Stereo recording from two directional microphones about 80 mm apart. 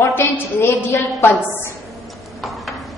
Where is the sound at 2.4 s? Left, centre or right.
Centre.